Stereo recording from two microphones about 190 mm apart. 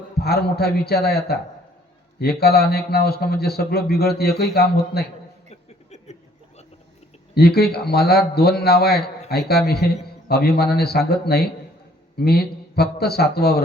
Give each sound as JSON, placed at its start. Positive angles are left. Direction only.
{"t": 0.2, "sound": "a man's voice", "side_deg": 55}
{"t": 5.5, "sound": "a sound", "side_deg": 35}
{"t": 7.3, "sound": "a man's voice", "side_deg": 55}